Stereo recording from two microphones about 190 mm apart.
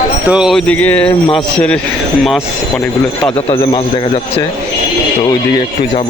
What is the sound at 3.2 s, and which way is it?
Speech, 25° left (ahead or behind).